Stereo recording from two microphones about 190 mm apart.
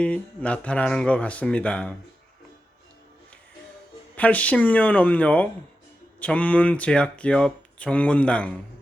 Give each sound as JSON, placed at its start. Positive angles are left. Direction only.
{"t": 0.0, "sound": "speech", "side_deg": 5}
{"t": 4.2, "sound": "speech", "side_deg": 5}